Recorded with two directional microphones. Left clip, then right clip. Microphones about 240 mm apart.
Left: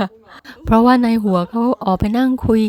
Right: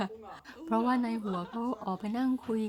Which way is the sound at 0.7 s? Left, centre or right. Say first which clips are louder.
Left 17 dB; left.